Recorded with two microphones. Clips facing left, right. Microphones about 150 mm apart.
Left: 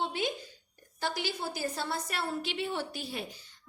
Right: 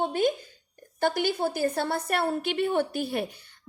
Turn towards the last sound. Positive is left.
turn(degrees=-55)  # may be behind; listen again after turning